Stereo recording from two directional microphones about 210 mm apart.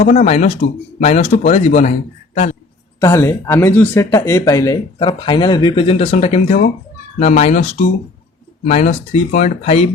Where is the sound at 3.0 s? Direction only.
15° left (ahead or behind).